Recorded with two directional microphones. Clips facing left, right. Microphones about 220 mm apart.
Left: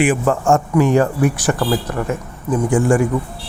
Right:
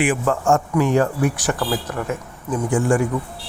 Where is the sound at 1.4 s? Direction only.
Centre (ahead or behind).